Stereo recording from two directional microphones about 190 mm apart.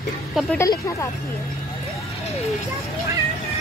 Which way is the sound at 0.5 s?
15° left (ahead or behind).